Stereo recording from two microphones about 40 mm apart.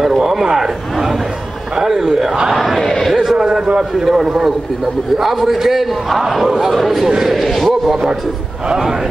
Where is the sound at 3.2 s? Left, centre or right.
Centre.